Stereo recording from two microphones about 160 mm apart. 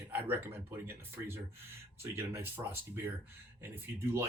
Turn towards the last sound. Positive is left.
turn(degrees=-15)  # may be behind; listen again after turning